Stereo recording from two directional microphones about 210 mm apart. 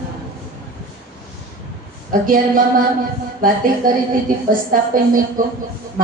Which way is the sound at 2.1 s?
40° right (ahead or behind).